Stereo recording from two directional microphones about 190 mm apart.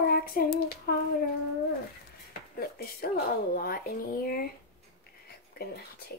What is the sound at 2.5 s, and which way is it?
Speech, 55° left (ahead or behind).